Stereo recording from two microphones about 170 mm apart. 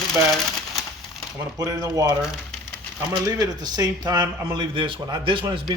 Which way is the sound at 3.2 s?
25° right (ahead or behind).